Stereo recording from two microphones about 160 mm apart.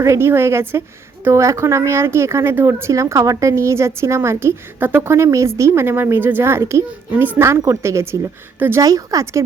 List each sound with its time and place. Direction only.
0.0 s speech: 15° right (ahead or behind)